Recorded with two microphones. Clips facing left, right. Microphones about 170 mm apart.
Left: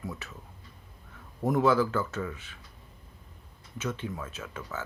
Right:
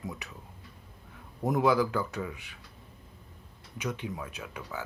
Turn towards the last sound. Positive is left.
turn(degrees=-15)  # may be behind; listen again after turning